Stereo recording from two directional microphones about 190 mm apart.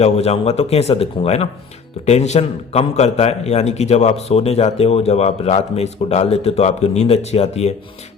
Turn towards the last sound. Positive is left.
turn(degrees=35)  # may be behind; listen again after turning